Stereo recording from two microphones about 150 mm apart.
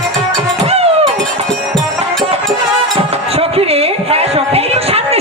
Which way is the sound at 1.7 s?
Centre (ahead or behind).